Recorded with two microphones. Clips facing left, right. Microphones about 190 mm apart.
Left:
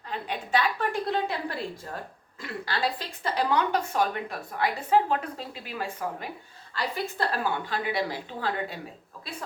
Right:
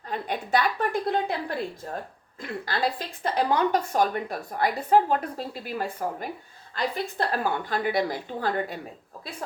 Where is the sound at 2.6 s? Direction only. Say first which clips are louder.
Right 2 dB; 45° right (ahead or behind).